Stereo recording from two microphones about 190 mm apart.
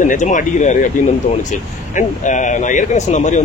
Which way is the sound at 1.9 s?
40° left (ahead or behind).